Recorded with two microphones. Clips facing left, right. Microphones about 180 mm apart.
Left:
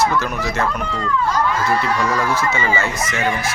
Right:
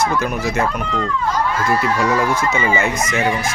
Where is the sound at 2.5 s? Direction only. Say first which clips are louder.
Right 2 dB; 15° right (ahead or behind).